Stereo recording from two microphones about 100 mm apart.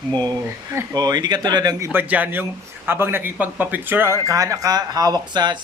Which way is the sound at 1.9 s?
15° right (ahead or behind).